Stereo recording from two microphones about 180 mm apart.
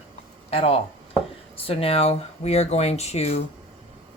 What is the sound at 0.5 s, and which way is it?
Speech, 35° left (ahead or behind).